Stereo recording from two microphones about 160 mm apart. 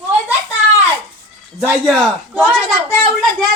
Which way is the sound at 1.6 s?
Centre (ahead or behind).